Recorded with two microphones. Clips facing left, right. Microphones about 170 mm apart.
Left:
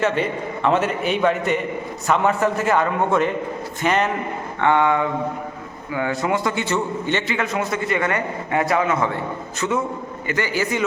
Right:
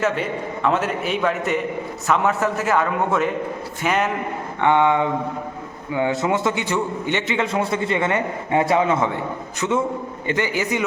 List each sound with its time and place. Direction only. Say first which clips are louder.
0.0 s a man's voice: left 1 dB; centre (ahead or behind)
4.6 s a man's voice: right 1 dB; 20° right (ahead or behind)